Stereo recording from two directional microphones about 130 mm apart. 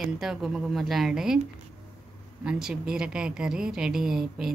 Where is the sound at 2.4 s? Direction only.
5° right (ahead or behind).